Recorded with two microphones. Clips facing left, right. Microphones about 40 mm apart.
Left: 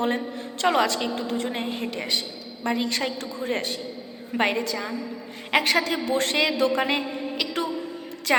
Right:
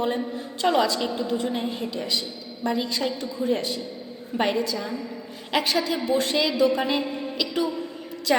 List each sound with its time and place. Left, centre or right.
0.6 s a woman's voice: left